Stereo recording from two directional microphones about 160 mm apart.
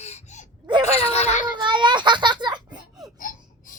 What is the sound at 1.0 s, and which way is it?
Speech, 40° left (ahead or behind).